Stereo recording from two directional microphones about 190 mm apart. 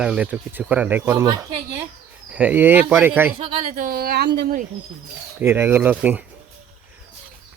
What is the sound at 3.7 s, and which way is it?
Speech, 50° right (ahead or behind).